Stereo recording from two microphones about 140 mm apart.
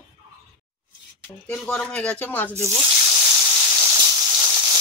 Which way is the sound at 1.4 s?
10° left (ahead or behind).